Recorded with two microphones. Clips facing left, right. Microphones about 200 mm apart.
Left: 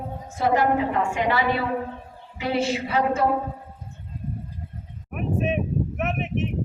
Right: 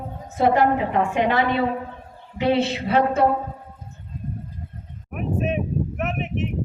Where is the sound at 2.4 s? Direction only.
30° right (ahead or behind).